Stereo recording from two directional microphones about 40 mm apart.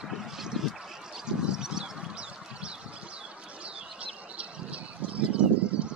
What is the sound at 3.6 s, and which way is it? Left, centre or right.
Bird, right.